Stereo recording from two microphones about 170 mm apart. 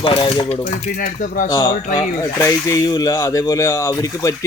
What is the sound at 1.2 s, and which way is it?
Speech, 55° left (ahead or behind).